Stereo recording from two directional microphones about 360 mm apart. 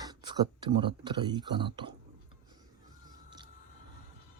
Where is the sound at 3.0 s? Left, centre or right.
Centre.